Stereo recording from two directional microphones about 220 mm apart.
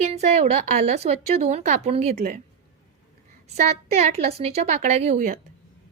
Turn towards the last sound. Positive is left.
turn(degrees=-35)  # may be behind; listen again after turning